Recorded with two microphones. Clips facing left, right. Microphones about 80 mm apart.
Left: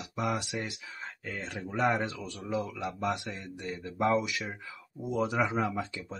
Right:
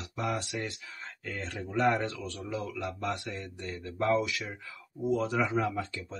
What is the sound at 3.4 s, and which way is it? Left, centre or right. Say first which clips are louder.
Speech: left 1 dB; centre.